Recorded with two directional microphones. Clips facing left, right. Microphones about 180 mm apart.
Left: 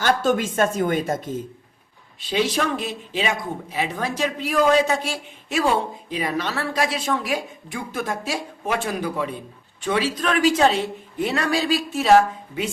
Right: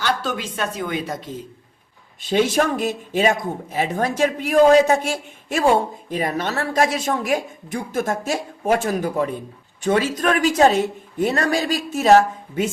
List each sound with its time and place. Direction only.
0.0 s speech: 45° left (ahead or behind)
2.2 s speech: 50° right (ahead or behind)